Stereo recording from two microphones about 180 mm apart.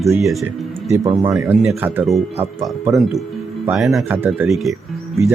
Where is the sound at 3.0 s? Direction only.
Centre (ahead or behind).